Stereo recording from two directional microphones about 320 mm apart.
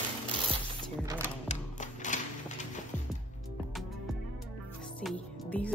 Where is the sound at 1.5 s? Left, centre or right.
Left.